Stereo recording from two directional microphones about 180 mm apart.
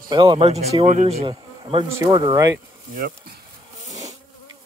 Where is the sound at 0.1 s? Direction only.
30° right (ahead or behind).